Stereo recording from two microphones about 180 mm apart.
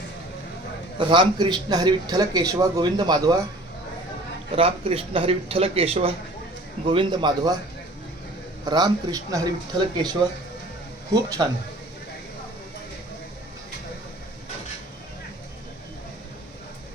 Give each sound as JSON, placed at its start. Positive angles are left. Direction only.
{"t": 0.9, "sound": "speech", "side_deg": -25}
{"t": 4.5, "sound": "speech", "side_deg": -30}
{"t": 8.6, "sound": "speech", "side_deg": -25}